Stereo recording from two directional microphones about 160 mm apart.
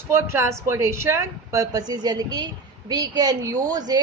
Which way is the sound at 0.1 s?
15° right (ahead or behind).